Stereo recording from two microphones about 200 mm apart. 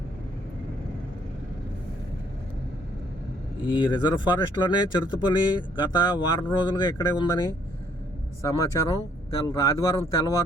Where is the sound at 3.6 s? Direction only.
20° left (ahead or behind).